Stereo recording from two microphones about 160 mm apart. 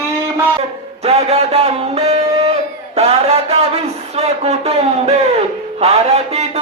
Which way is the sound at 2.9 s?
40° right (ahead or behind).